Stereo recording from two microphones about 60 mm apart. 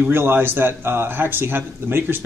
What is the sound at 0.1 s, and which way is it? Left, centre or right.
A man's voice, right.